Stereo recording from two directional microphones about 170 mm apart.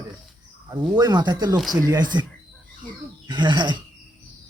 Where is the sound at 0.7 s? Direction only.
20° right (ahead or behind).